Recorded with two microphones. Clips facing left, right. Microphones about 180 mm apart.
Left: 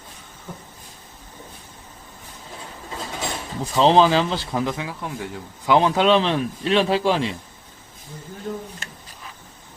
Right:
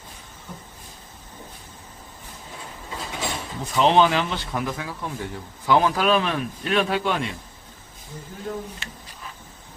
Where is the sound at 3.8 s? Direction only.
30° left (ahead or behind).